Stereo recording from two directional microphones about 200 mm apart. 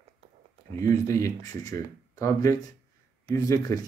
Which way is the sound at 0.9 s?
15° left (ahead or behind).